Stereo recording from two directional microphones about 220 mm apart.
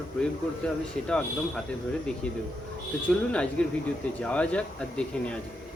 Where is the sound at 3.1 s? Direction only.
5° left (ahead or behind).